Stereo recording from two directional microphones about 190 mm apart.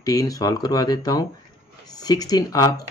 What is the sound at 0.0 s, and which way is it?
Speech, 20° left (ahead or behind).